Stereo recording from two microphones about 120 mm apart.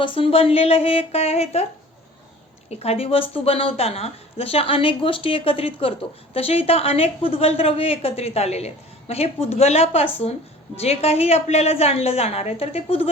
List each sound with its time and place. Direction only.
0.0 s speech: 45° left (ahead or behind)
2.6 s speech: 60° left (ahead or behind)